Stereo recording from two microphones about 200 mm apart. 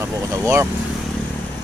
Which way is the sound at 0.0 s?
15° right (ahead or behind).